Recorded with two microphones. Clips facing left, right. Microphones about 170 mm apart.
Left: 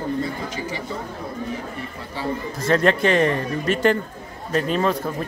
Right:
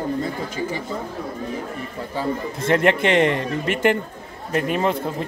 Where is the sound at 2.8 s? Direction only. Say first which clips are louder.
Right 1 dB; 20° right (ahead or behind).